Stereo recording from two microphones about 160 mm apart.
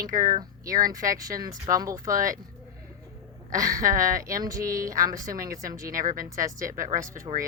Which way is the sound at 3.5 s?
20° right (ahead or behind).